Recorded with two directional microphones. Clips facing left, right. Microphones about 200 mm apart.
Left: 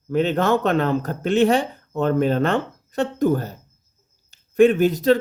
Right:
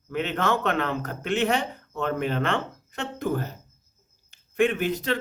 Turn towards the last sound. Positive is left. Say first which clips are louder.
# left 9 dB
turn(degrees=40)  # may be behind; listen again after turning